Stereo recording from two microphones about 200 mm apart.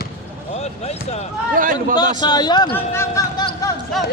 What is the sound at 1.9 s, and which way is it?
A man's voice, 20° left (ahead or behind).